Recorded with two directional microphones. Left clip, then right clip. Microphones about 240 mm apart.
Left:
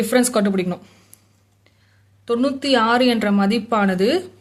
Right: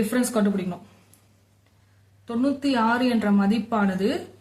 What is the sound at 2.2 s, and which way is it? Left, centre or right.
A woman's voice, left.